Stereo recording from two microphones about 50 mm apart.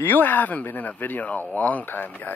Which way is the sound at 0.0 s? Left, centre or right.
Left.